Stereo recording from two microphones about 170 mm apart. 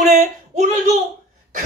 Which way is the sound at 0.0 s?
50° right (ahead or behind).